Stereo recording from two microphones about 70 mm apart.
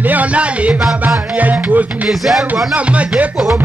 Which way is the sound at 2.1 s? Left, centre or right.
Centre.